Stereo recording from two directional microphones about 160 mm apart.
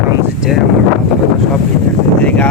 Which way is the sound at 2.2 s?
10° left (ahead or behind).